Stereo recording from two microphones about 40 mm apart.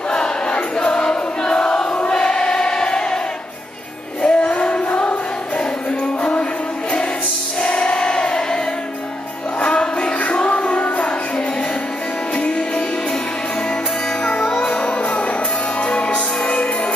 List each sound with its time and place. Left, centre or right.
0.1 s music: left
2.1 s choir: left
4.2 s music: left
7.6 s music: left
9.6 s music: left
10.4 s music: left
12.4 s music: left
14.6 s music: left